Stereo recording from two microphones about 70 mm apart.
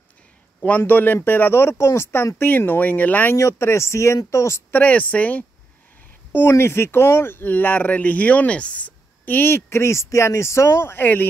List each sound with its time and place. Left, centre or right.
0.7 s speech: left
2.3 s speech: left
3.3 s speech: left
4.7 s speech: left
6.5 s speech: left